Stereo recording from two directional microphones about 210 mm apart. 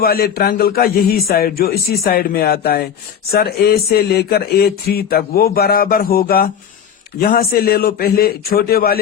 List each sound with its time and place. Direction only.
0.0 s speech: 45° left (ahead or behind)